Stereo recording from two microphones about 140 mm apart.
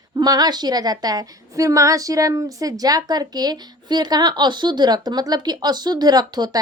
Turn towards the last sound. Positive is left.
turn(degrees=-30)  # may be behind; listen again after turning